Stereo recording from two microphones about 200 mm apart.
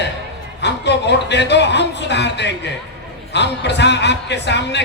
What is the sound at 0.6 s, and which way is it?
Speech, 60° left (ahead or behind).